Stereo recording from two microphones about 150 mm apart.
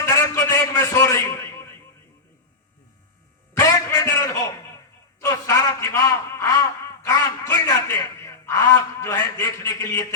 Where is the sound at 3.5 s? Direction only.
20° left (ahead or behind).